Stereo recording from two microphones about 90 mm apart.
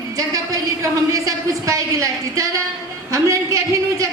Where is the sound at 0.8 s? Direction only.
35° right (ahead or behind).